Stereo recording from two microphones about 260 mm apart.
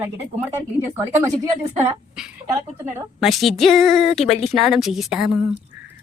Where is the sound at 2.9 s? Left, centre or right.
Centre.